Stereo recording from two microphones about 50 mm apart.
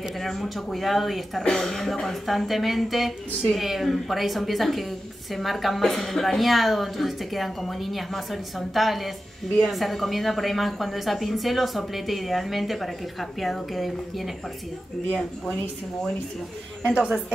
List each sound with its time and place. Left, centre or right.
0.2 s a woman's voice: centre
1.4 s a woman's voice: centre
16.8 s a woman's voice: centre